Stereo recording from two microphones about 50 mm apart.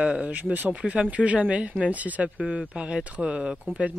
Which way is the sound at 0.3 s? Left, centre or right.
Right.